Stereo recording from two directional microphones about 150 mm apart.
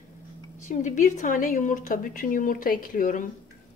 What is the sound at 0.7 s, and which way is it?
Speech, 55° left (ahead or behind).